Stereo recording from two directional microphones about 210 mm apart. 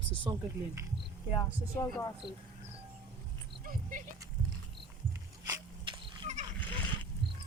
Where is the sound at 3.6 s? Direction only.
40° right (ahead or behind).